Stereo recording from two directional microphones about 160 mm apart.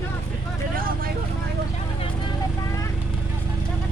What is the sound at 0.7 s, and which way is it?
Speech, 65° right (ahead or behind).